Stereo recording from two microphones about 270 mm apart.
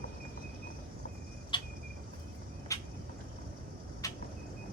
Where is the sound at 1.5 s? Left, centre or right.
Centre.